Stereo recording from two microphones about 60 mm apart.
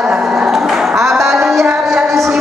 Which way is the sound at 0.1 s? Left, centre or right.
Centre.